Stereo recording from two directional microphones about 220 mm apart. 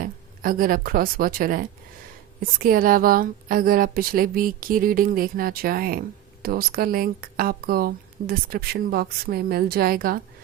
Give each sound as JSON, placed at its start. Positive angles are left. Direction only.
{"t": 0.0, "sound": "speech", "side_deg": -40}